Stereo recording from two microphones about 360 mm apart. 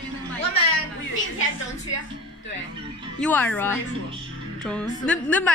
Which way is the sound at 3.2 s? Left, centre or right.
Centre.